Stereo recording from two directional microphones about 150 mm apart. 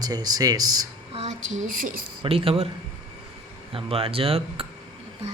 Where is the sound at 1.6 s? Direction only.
65° right (ahead or behind).